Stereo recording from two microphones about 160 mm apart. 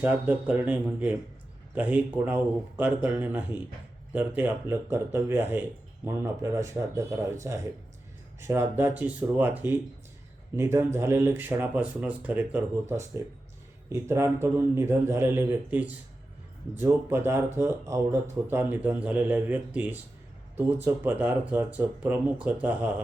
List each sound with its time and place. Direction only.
0.0 s speech: 10° right (ahead or behind)